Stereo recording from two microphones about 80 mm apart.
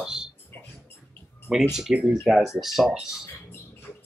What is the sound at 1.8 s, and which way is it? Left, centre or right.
Speech, centre.